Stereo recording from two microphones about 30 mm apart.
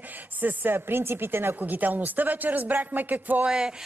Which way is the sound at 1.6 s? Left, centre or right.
Right.